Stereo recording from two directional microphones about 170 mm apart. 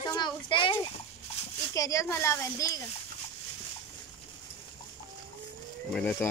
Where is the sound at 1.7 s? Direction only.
20° left (ahead or behind).